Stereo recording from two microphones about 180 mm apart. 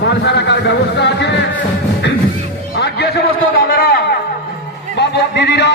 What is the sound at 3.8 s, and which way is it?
Music, 60° left (ahead or behind).